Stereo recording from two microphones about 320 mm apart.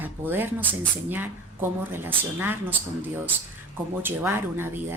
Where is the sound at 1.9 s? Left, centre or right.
Centre.